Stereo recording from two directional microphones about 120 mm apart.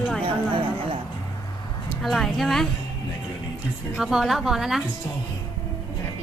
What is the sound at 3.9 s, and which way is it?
Speech, centre (ahead or behind).